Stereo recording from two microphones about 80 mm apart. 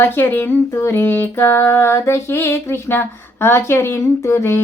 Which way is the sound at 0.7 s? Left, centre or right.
Left.